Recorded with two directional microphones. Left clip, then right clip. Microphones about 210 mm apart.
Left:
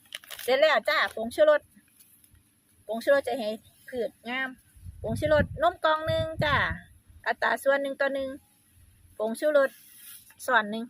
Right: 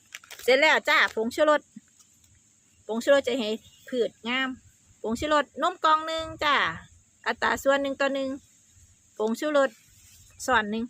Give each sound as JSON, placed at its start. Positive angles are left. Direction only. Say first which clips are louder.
{"t": 0.4, "sound": "speech", "louder": "right 2 dB", "side_deg": -30}
{"t": 2.8, "sound": "speech", "louder": "right 2 dB", "side_deg": -25}